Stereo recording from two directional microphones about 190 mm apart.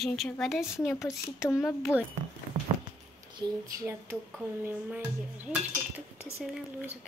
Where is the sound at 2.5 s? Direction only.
35° right (ahead or behind).